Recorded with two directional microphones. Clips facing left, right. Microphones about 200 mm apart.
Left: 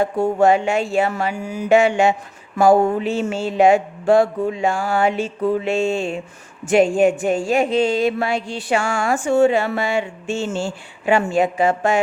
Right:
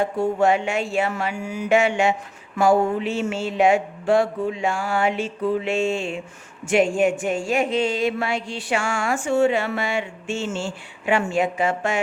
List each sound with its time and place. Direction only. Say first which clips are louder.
0.2 s speech: left 4 dB; 40° left (ahead or behind)